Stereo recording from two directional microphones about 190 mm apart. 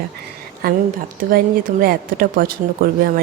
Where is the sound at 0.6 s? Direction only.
50° right (ahead or behind).